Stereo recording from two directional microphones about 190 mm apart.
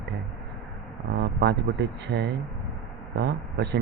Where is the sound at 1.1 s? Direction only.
65° right (ahead or behind).